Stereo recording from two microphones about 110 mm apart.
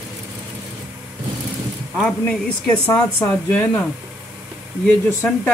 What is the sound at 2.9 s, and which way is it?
A man's voice, 20° left (ahead or behind).